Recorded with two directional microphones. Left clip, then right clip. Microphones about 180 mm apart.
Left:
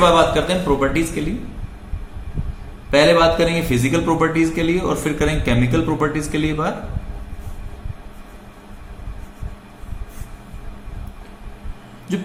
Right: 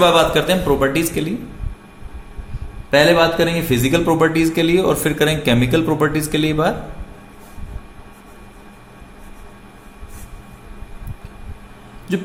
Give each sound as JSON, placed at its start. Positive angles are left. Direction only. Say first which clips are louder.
{"t": 0.0, "sound": "speech", "louder": "right 1 dB", "side_deg": -45}
{"t": 2.9, "sound": "speech", "louder": "even", "side_deg": -35}